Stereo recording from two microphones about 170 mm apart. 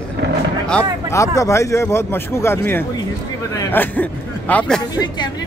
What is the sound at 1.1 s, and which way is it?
A man's voice, 20° left (ahead or behind).